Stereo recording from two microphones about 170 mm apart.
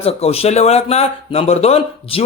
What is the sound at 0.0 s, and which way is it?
Speech, 35° left (ahead or behind).